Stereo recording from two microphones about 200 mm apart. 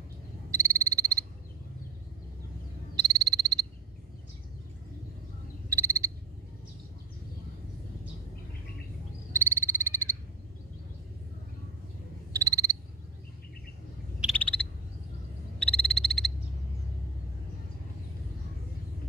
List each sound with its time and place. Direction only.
0.5 s frog: 15° right (ahead or behind)
3.0 s frog: 20° right (ahead or behind)
5.7 s frog: 15° right (ahead or behind)
9.3 s frog: 10° right (ahead or behind)
12.3 s frog: 15° right (ahead or behind)
14.2 s frog: 5° left (ahead or behind)